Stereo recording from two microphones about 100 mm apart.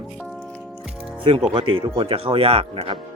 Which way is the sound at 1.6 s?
60° right (ahead or behind).